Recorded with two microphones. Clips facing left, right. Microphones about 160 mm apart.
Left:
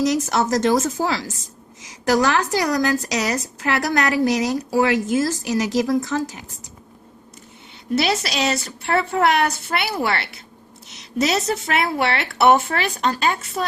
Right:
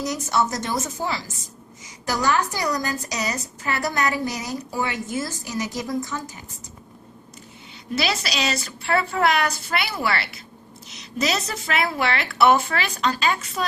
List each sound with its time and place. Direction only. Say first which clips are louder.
0.0 s a woman's voice: left 4 dB; 90° left
7.9 s a woman's voice: left 4 dB; 60° left (ahead or behind)